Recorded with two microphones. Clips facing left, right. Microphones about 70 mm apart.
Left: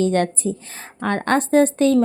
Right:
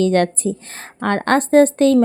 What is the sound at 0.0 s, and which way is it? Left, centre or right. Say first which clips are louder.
A woman's voice: right 3 dB; right.